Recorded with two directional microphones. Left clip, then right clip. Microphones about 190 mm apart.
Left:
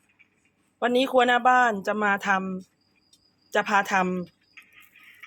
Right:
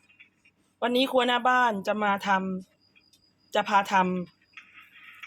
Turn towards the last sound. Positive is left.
turn(degrees=15)  # may be behind; listen again after turning